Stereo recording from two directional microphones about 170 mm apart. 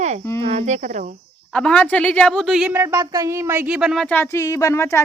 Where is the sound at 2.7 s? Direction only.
15° right (ahead or behind).